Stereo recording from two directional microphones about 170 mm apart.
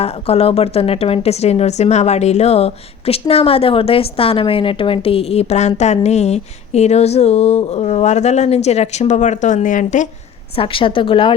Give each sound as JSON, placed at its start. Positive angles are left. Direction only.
{"t": 0.0, "sound": "a woman's voice", "side_deg": 35}
{"t": 10.5, "sound": "a woman's voice", "side_deg": 30}